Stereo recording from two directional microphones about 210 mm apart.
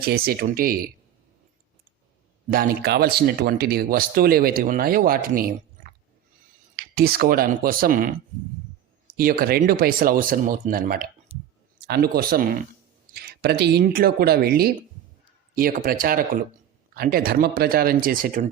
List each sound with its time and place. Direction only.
0.0 s speech: 45° right (ahead or behind)
2.5 s speech: 45° right (ahead or behind)
6.7 s speech: 45° right (ahead or behind)
9.1 s speech: 45° right (ahead or behind)